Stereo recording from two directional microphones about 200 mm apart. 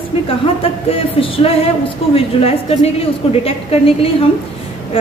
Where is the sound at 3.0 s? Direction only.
30° left (ahead or behind).